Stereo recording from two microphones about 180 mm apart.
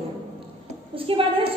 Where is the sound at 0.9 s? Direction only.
30° right (ahead or behind).